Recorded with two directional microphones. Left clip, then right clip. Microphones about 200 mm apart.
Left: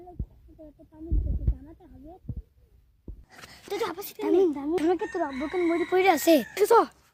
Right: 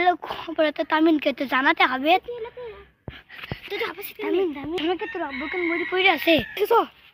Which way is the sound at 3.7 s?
60° left (ahead or behind).